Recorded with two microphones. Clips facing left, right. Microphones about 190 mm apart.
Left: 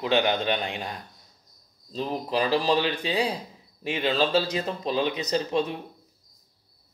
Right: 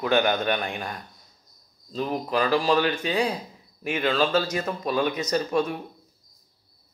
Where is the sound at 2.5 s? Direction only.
20° left (ahead or behind).